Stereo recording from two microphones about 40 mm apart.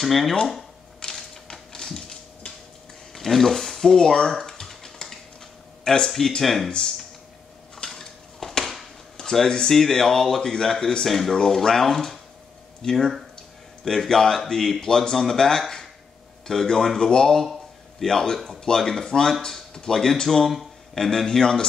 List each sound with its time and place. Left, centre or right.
0.0 s speech: centre
1.0 s typewriter: centre
3.2 s a sound: centre
5.9 s speech: centre
7.7 s a sound: centre
9.1 s speech: centre